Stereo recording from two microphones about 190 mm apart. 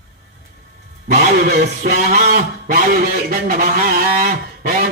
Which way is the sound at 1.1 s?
40° right (ahead or behind).